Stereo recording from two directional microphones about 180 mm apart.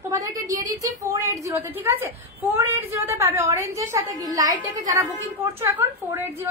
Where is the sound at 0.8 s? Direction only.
20° right (ahead or behind).